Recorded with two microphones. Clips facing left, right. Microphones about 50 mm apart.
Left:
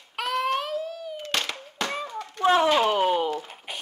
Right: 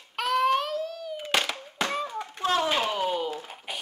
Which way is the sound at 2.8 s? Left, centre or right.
Left.